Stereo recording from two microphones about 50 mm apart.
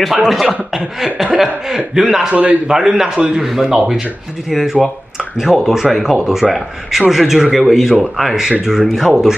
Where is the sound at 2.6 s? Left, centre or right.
Centre.